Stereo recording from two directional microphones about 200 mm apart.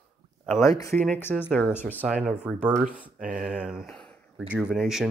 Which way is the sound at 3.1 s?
40° right (ahead or behind).